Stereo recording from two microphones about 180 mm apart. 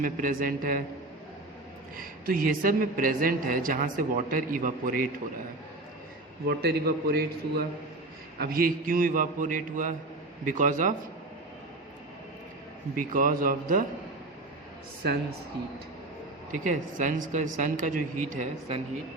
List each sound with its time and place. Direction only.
0.0 s a woman's voice: 50° right (ahead or behind)
2.0 s a woman's voice: 50° right (ahead or behind)
6.5 s a man's voice: 60° right (ahead or behind)
8.4 s a woman's voice: 55° right (ahead or behind)
13.0 s a woman's voice: 50° right (ahead or behind)
16.5 s a woman's voice: 45° right (ahead or behind)